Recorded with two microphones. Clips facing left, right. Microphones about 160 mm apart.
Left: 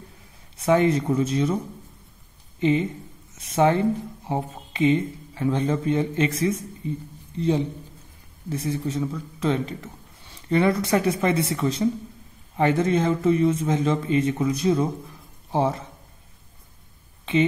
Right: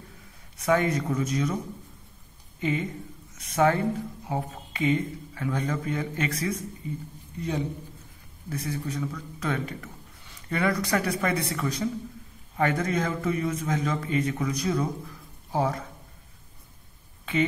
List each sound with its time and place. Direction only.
0.6 s speech: 25° left (ahead or behind)
2.6 s speech: 25° left (ahead or behind)